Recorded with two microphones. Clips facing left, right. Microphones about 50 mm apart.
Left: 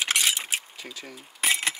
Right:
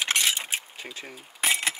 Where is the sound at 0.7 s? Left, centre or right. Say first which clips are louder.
Right 1 dB; right.